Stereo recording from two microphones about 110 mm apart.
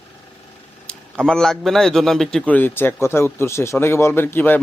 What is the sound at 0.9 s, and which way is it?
A man's voice, 10° left (ahead or behind).